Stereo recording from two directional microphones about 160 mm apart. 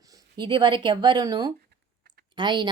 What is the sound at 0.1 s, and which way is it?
A woman's voice, 30° right (ahead or behind).